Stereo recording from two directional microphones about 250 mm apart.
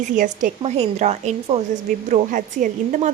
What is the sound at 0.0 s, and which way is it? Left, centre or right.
A woman's voice, right.